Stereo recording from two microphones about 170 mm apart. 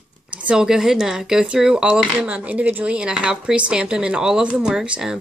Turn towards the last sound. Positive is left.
turn(degrees=-5)  # may be behind; listen again after turning